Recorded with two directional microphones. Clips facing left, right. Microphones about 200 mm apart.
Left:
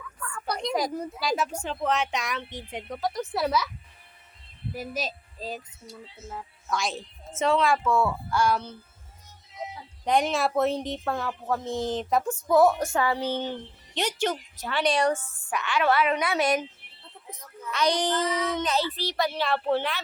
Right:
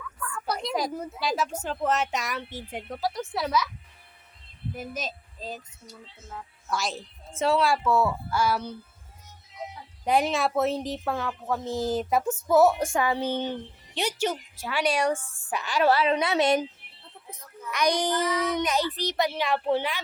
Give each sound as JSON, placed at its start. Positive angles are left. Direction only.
{"t": 0.4, "sound": "a woman's voice", "side_deg": -5}
{"t": 4.7, "sound": "a woman's voice", "side_deg": 5}
{"t": 10.0, "sound": "a woman's voice", "side_deg": -5}
{"t": 15.5, "sound": "a woman's voice", "side_deg": -35}
{"t": 17.7, "sound": "speech", "side_deg": -15}